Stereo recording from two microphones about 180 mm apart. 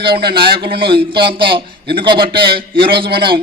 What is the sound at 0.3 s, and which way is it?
A man's voice, 30° right (ahead or behind).